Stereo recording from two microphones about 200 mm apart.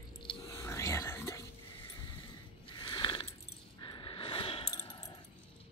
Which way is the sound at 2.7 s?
25° left (ahead or behind).